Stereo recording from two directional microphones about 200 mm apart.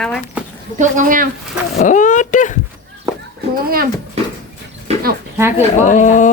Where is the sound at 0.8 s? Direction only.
40° right (ahead or behind).